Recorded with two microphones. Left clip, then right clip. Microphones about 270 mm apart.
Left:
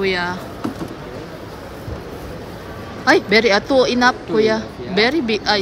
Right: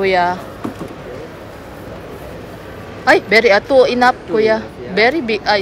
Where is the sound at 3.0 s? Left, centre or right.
Centre.